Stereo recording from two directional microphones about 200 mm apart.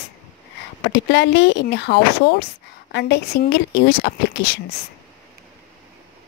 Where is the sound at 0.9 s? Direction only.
60° left (ahead or behind).